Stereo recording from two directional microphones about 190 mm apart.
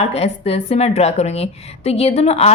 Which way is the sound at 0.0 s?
30° left (ahead or behind).